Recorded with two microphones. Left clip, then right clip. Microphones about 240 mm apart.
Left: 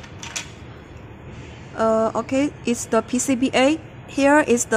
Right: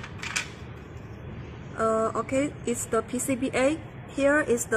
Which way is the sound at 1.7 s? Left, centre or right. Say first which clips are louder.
Left 6 dB; left.